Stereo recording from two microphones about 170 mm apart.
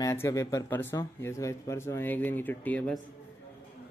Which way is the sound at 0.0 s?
20° left (ahead or behind).